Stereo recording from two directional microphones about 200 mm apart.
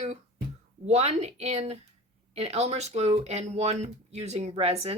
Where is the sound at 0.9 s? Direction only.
35° right (ahead or behind).